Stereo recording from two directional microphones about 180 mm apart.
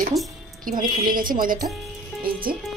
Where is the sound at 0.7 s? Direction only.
50° right (ahead or behind).